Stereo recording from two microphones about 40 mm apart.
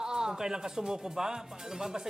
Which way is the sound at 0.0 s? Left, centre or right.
Centre.